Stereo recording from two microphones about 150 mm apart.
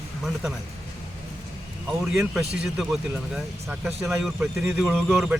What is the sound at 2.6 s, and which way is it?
A man's voice, centre (ahead or behind).